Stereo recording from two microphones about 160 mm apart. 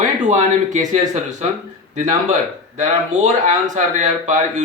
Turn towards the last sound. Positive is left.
turn(degrees=-50)  # may be behind; listen again after turning